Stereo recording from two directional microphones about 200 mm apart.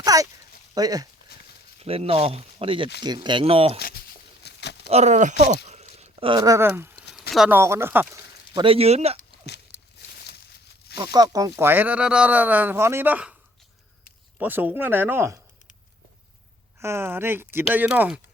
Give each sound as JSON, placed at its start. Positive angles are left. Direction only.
{"t": 0.0, "sound": "a sound", "side_deg": -20}
{"t": 0.7, "sound": "speech", "side_deg": -20}
{"t": 1.8, "sound": "speech", "side_deg": -30}
{"t": 3.8, "sound": "a sound", "side_deg": 50}
{"t": 4.9, "sound": "speech", "side_deg": -35}
{"t": 5.6, "sound": "a sound", "side_deg": -35}
{"t": 7.2, "sound": "speech", "side_deg": 0}
{"t": 8.6, "sound": "speech", "side_deg": -30}
{"t": 10.0, "sound": "a sound", "side_deg": 55}
{"t": 10.9, "sound": "speech", "side_deg": -20}
{"t": 14.3, "sound": "speech", "side_deg": -10}
{"t": 16.8, "sound": "speech", "side_deg": -10}